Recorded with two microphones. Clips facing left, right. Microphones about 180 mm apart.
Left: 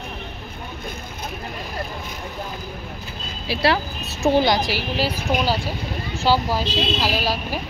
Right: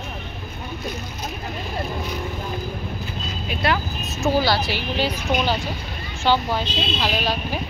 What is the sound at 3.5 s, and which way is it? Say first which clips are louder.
Speech: left 3 dB; 30° left (ahead or behind).